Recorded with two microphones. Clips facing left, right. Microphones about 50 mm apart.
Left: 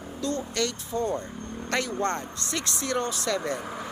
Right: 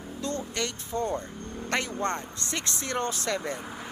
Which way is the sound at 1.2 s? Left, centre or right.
Centre.